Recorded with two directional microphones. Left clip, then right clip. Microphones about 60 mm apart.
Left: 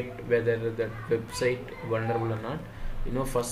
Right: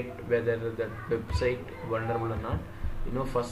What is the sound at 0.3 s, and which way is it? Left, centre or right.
Speech, left.